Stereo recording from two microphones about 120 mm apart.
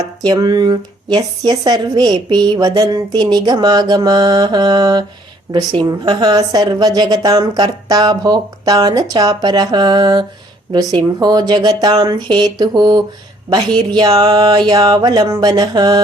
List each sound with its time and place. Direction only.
0.2 s speech: 35° right (ahead or behind)